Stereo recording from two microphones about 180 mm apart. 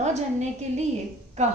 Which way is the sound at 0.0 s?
40° right (ahead or behind).